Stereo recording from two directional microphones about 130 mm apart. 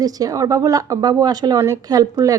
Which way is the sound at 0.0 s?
25° right (ahead or behind).